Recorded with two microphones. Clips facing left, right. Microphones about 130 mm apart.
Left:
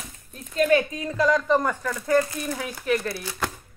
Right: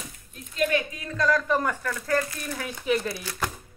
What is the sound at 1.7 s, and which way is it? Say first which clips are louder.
Speech: left 4 dB; 15° left (ahead or behind).